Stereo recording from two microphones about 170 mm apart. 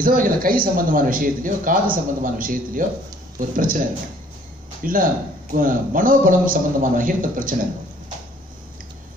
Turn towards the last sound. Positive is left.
turn(degrees=-55)  # may be behind; listen again after turning